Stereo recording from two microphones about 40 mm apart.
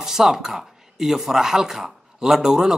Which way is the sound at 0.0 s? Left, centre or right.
Centre.